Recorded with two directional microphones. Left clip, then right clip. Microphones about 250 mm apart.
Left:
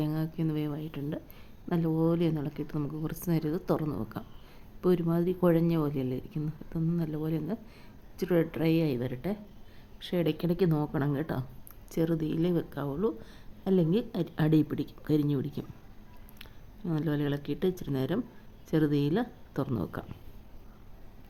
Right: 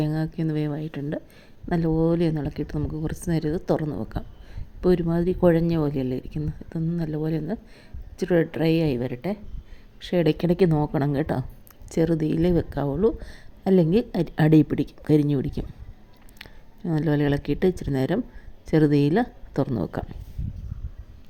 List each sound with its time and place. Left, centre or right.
0.0 s a woman's voice: centre